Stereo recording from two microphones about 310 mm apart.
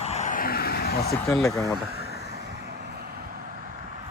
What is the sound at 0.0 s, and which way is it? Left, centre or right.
Vehicle, left.